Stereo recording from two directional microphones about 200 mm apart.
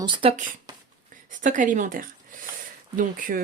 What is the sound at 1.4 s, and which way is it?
Speech, 40° right (ahead or behind).